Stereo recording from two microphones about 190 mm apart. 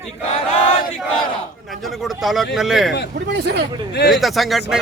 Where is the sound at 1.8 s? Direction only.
Centre (ahead or behind).